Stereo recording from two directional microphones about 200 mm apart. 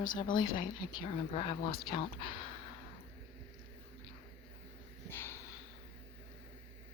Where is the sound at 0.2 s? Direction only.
20° left (ahead or behind).